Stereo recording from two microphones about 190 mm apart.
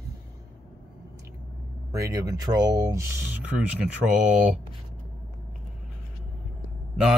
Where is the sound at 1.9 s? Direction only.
15° right (ahead or behind).